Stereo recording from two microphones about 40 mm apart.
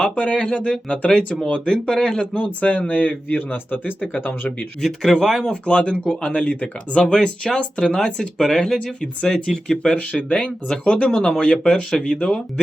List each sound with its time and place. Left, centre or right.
0.2 s speech: left
2.4 s speech: left
4.1 s speech: left
5.1 s speech: centre
5.5 s speech: left
7.0 s speech: left
9.9 s speech: left